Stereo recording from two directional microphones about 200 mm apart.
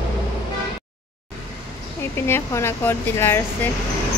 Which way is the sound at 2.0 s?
10° left (ahead or behind).